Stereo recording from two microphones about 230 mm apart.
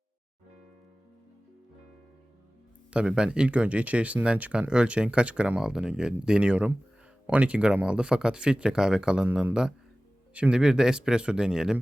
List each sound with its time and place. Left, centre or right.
2.9 s speech: centre